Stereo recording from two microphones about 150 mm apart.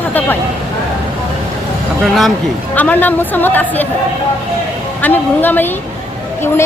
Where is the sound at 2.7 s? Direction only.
10° left (ahead or behind).